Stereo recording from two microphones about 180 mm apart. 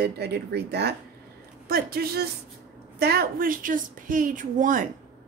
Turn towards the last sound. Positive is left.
turn(degrees=-45)  # may be behind; listen again after turning